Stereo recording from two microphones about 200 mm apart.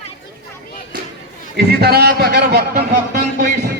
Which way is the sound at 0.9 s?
45° right (ahead or behind).